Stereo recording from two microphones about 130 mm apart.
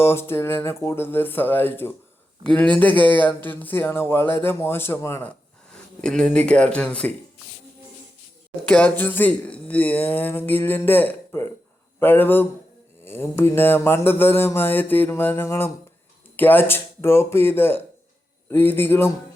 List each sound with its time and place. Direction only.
0.0 s speech: 20° left (ahead or behind)
5.7 s speech: 5° left (ahead or behind)
8.6 s speech: 10° left (ahead or behind)